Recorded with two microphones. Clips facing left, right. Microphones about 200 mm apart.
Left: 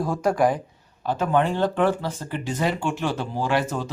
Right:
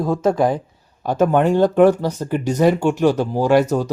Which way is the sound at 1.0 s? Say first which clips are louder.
Right 6 dB; 45° right (ahead or behind).